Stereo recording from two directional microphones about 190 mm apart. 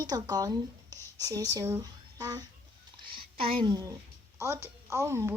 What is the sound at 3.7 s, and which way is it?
A woman's voice, 20° right (ahead or behind).